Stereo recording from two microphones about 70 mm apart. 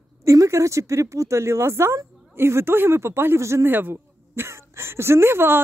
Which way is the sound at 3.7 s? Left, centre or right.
Right.